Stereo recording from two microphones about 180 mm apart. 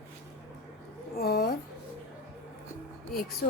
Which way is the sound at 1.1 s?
60° left (ahead or behind).